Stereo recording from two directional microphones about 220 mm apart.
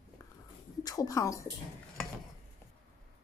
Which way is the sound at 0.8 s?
15° left (ahead or behind).